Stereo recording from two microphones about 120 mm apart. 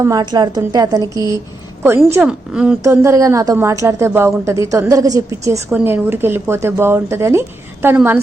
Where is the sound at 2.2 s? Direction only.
10° right (ahead or behind).